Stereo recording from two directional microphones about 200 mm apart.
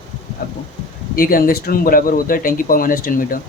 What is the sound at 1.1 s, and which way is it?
A man's voice, 45° left (ahead or behind).